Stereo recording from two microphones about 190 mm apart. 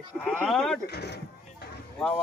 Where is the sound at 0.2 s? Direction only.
10° left (ahead or behind).